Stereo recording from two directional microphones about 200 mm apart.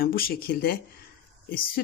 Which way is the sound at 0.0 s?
45° left (ahead or behind).